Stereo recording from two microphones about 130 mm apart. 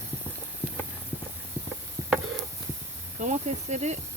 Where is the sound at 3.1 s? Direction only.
65° right (ahead or behind).